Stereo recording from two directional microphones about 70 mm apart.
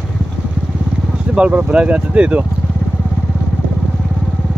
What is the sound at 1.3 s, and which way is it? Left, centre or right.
Speech, centre.